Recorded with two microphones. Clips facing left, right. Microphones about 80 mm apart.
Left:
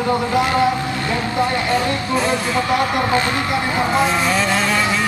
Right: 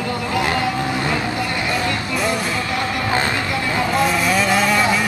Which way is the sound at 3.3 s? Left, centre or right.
Left.